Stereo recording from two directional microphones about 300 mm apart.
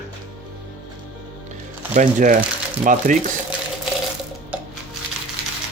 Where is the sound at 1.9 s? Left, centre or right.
Right.